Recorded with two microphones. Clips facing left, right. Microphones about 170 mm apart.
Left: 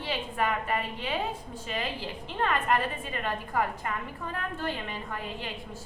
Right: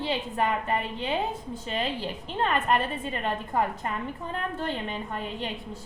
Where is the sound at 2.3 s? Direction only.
25° right (ahead or behind).